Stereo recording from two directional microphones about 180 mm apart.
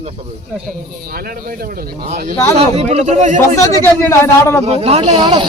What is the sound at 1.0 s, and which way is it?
Speech, 55° right (ahead or behind).